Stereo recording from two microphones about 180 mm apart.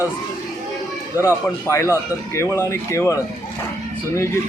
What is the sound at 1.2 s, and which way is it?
Speech, 15° left (ahead or behind).